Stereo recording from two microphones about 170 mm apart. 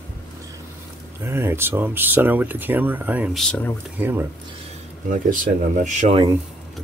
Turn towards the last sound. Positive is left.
turn(degrees=-50)  # may be behind; listen again after turning